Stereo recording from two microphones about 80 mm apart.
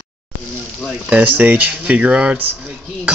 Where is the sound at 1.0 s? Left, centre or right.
Centre.